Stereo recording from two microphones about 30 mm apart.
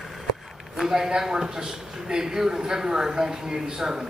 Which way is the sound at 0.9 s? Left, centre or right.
Centre.